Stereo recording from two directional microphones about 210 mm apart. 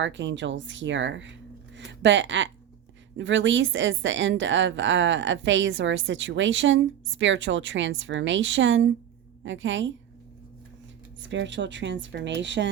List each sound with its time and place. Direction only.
0.0 s a woman's voice: 60° right (ahead or behind)
11.2 s a woman's voice: 60° right (ahead or behind)